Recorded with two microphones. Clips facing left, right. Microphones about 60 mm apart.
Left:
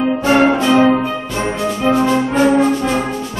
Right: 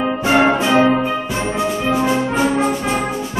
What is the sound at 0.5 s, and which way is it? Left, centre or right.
Music, centre.